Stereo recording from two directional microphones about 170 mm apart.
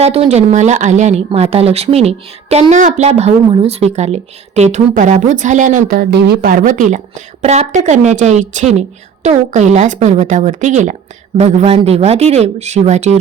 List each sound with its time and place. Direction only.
0.0 s a woman's voice: 35° right (ahead or behind)